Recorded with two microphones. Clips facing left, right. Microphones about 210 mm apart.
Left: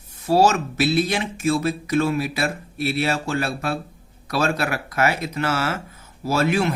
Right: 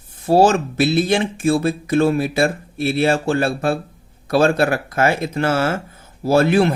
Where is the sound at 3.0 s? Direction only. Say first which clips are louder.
Right 7 dB; 50° right (ahead or behind).